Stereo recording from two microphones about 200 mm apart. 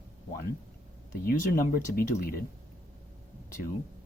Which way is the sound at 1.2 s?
45° left (ahead or behind).